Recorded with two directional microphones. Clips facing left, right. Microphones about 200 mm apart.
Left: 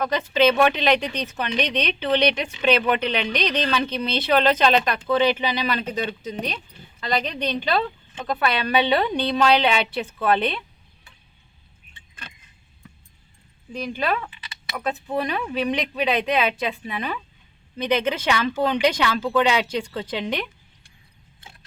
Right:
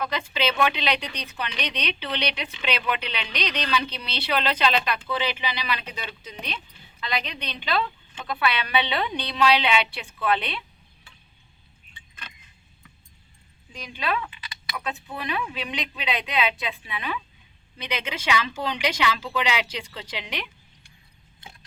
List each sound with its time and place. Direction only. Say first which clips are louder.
0.0 s speech: left 8 dB; 45° left (ahead or behind)
13.8 s speech: left 3 dB; 45° left (ahead or behind)